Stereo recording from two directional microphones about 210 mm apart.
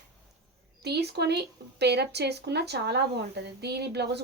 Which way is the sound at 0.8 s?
50° right (ahead or behind).